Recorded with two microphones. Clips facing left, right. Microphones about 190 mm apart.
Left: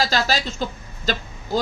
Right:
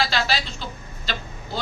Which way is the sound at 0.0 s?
40° left (ahead or behind).